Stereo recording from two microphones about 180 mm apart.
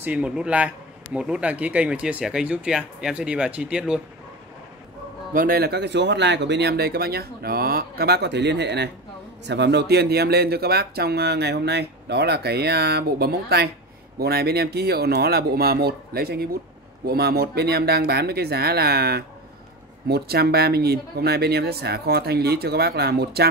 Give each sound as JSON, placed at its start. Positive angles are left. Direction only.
{"t": 0.0, "sound": "a man's voice", "side_deg": -5}
{"t": 5.3, "sound": "speech", "side_deg": -50}